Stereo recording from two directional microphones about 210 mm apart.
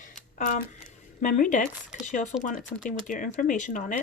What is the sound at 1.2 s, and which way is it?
Speech, 35° left (ahead or behind).